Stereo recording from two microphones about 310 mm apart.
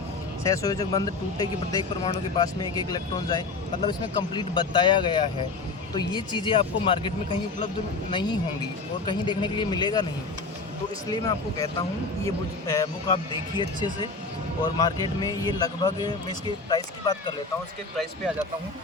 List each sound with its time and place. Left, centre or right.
0.4 s speech: centre
8.1 s speech: centre
11.1 s speech: centre
17.9 s speech: centre